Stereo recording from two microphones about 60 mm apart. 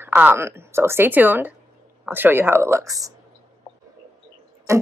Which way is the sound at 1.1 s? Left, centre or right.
Right.